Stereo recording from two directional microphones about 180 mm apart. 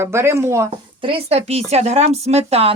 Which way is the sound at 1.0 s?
30° right (ahead or behind).